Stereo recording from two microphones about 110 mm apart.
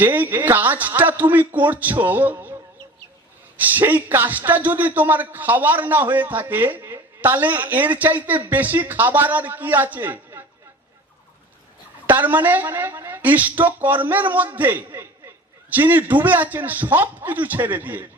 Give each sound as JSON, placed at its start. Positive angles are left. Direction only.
{"t": 0.0, "sound": "a man's voice", "side_deg": -15}
{"t": 3.6, "sound": "a man's voice", "side_deg": -15}
{"t": 12.0, "sound": "a man's voice", "side_deg": -15}